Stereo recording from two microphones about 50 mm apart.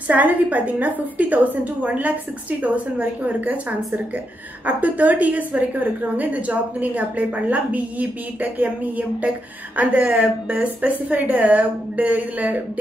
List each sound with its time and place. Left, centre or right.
0.1 s a woman's voice: right